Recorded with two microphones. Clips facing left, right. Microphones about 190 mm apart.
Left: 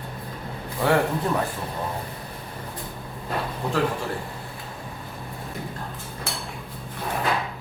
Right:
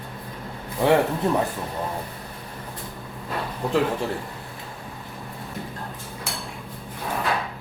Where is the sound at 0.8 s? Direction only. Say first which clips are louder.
Right 3 dB; 20° right (ahead or behind).